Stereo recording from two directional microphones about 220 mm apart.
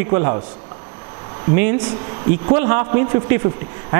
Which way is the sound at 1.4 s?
10° right (ahead or behind).